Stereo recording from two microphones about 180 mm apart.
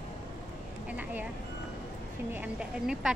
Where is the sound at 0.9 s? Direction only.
10° right (ahead or behind).